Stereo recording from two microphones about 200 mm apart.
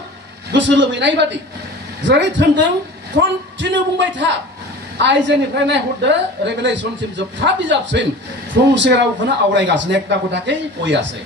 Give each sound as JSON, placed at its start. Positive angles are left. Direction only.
{"t": 0.5, "sound": "a man's voice", "side_deg": -65}